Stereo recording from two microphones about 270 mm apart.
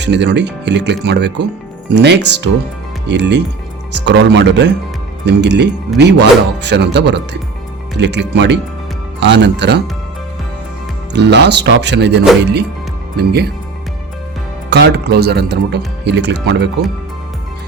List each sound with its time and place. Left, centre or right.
0.0 s speech: right
11.1 s speech: right
14.7 s speech: right